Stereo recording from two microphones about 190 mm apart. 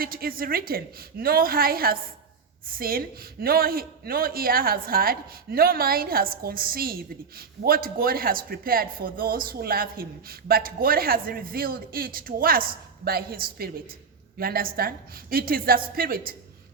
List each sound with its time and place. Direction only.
0.0 s a man's voice: 50° right (ahead or behind)